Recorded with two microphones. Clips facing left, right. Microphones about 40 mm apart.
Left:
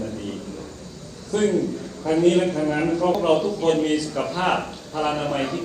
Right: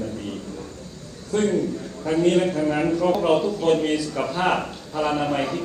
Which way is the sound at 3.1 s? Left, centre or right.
Centre.